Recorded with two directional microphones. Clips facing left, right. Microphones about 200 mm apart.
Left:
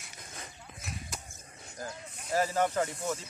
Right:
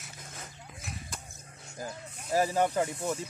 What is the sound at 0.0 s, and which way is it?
Dog, centre (ahead or behind).